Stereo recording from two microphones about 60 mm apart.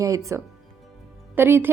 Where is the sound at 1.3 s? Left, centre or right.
Right.